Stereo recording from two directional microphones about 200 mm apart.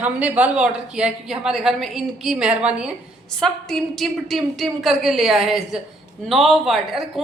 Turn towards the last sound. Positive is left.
turn(degrees=0)  # may be behind; listen again after turning